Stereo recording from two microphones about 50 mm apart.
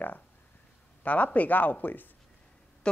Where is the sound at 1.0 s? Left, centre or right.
Left.